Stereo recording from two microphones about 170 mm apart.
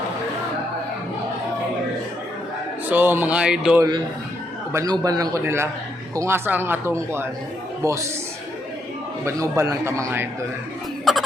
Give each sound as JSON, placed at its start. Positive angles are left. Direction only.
{"t": 2.9, "sound": "speech", "side_deg": -10}
{"t": 3.8, "sound": "a man's voice", "side_deg": -25}
{"t": 9.2, "sound": "speech", "side_deg": -15}
{"t": 11.1, "sound": "a sound", "side_deg": 0}